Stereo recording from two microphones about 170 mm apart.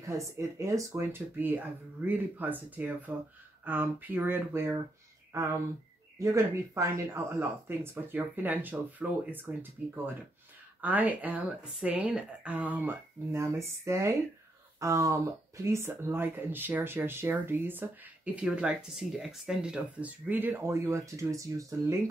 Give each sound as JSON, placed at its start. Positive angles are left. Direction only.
{"t": 0.0, "sound": "speech", "side_deg": -15}